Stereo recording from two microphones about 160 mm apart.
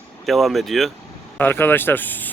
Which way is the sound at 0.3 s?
Centre (ahead or behind).